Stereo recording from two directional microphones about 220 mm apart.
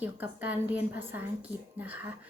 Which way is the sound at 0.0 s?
5° right (ahead or behind).